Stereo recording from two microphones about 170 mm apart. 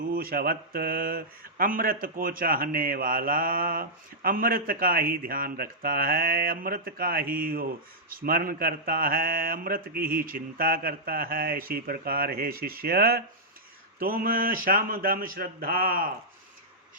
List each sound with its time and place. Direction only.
0.0 s speech: 60° right (ahead or behind)